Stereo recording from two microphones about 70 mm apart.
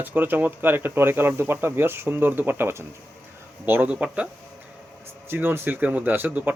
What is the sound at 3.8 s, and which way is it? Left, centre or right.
Speech, centre.